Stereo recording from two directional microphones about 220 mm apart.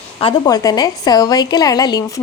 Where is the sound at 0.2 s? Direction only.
20° left (ahead or behind).